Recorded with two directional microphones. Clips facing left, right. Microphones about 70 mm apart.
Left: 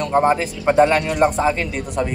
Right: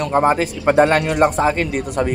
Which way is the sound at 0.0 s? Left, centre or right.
Right.